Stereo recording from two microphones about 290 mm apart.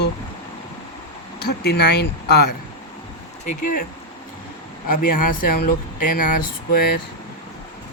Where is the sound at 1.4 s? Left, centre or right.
Left.